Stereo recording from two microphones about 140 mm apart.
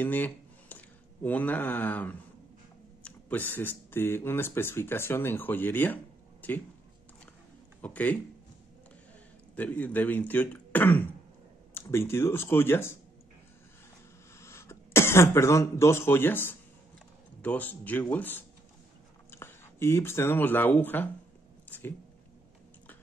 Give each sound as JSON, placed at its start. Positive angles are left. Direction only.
{"t": 0.0, "sound": "speech", "side_deg": 10}
{"t": 7.8, "sound": "speech", "side_deg": 10}
{"t": 9.6, "sound": "speech", "side_deg": 10}
{"t": 14.4, "sound": "speech", "side_deg": 20}
{"t": 21.6, "sound": "a sound", "side_deg": 15}